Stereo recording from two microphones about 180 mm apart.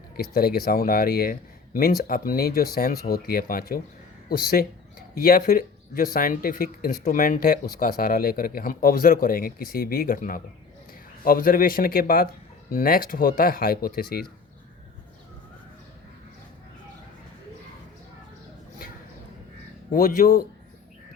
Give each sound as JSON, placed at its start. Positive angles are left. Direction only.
{"t": 0.2, "sound": "speech", "side_deg": 55}
{"t": 19.9, "sound": "speech", "side_deg": 50}